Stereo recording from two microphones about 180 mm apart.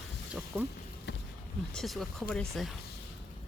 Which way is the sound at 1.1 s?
70° left (ahead or behind).